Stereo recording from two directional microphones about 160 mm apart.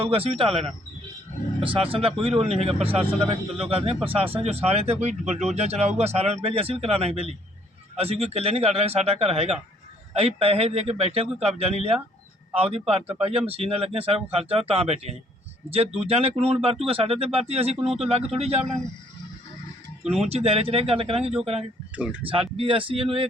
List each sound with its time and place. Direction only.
0.0 s speech: 35° right (ahead or behind)
20.2 s speech: 40° right (ahead or behind)
21.9 s speech: 10° right (ahead or behind)
22.2 s speech: 35° right (ahead or behind)